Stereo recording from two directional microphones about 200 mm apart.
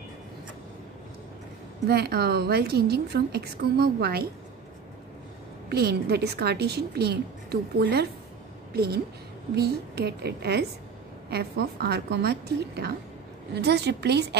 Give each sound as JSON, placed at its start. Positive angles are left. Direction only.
{"t": 1.9, "sound": "a woman's voice", "side_deg": -50}
{"t": 5.7, "sound": "a woman's voice", "side_deg": -50}